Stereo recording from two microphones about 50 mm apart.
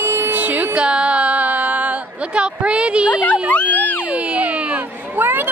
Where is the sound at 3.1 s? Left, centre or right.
Left.